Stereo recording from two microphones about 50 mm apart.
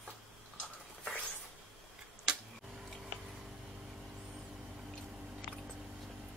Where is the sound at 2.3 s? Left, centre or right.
Centre.